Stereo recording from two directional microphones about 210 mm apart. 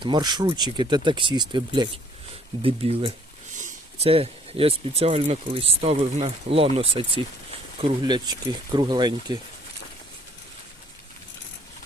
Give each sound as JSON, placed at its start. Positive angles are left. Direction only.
{"t": 0.0, "sound": "speech", "side_deg": -20}
{"t": 3.5, "sound": "speech", "side_deg": -35}